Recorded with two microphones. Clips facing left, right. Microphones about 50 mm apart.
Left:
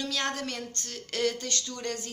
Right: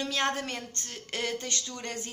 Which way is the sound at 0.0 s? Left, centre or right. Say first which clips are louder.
Right 2 dB; right.